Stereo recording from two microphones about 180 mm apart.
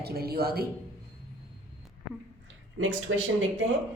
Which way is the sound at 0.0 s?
60° right (ahead or behind).